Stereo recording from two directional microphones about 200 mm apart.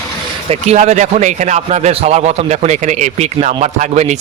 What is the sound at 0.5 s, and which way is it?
Speech, 35° right (ahead or behind).